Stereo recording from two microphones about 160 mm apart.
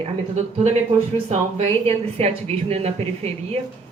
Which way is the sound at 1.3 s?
45° right (ahead or behind).